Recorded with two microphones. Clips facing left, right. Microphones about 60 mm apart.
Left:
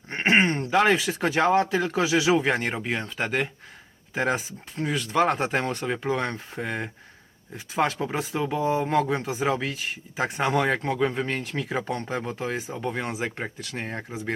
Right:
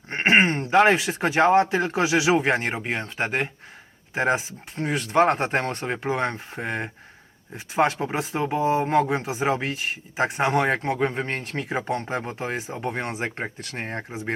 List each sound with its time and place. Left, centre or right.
0.1 s a sound: centre
0.9 s speech: right
5.4 s speech: right
9.0 s speech: centre
13.6 s speech: right
13.8 s speech: right